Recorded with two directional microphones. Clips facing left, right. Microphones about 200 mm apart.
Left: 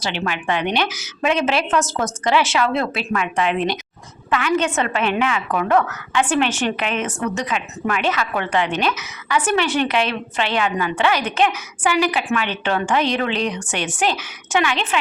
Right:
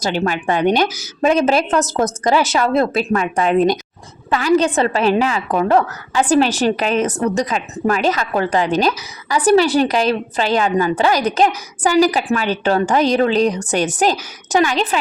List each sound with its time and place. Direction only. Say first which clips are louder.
0.0 s a woman's voice: right 5 dB; 40° right (ahead or behind)